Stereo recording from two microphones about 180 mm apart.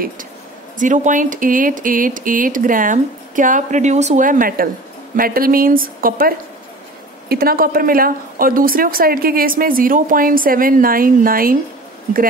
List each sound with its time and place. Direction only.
0.7 s a woman's voice: 45° right (ahead or behind)